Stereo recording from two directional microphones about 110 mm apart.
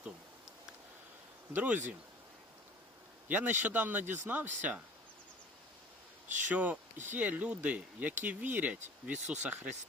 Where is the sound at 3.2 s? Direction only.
15° right (ahead or behind).